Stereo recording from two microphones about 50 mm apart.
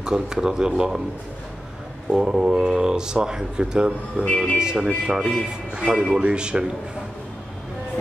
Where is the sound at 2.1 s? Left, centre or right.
Centre.